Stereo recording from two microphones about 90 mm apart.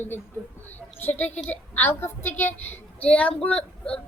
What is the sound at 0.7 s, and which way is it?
A woman's voice, 20° left (ahead or behind).